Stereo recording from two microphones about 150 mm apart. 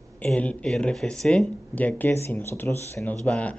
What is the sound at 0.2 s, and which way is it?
Speech, 10° left (ahead or behind).